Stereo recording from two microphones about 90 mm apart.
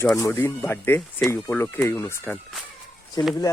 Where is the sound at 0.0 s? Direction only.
30° left (ahead or behind).